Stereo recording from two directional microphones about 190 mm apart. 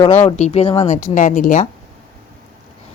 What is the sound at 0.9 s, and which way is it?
Speech, 45° left (ahead or behind).